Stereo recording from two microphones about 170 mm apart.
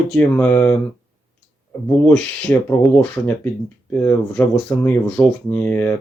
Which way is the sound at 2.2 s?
10° left (ahead or behind).